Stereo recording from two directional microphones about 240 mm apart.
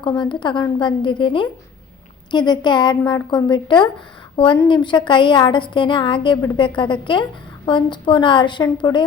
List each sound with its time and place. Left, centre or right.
0.0 s a woman's voice: centre